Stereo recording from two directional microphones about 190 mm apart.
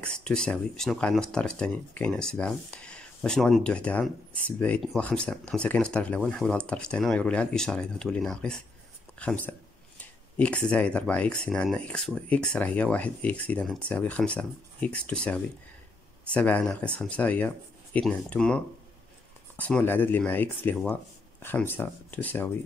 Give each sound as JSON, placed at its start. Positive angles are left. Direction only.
{"t": 0.0, "sound": "speech", "side_deg": 5}